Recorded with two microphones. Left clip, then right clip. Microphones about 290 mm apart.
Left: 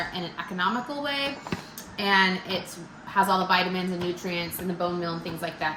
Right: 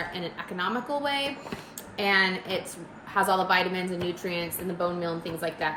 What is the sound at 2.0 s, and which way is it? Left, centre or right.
A woman's voice, centre.